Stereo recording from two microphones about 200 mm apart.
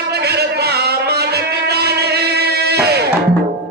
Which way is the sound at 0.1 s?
55° right (ahead or behind).